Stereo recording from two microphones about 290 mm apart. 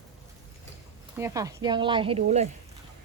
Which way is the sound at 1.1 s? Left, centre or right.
Centre.